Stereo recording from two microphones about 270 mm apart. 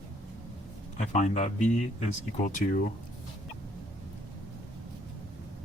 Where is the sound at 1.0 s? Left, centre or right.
Left.